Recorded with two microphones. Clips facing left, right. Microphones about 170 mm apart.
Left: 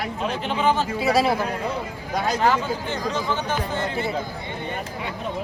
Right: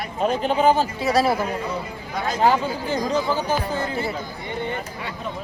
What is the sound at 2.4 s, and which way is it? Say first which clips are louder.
Speech: right 6 dB; 35° right (ahead or behind).